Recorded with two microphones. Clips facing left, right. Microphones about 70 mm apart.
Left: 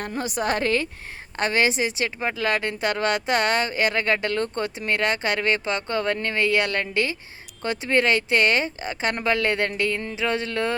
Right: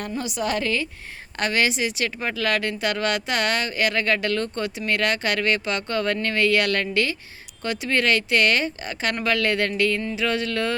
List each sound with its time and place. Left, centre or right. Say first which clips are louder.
0.2 s a woman's voice: left 2 dB; left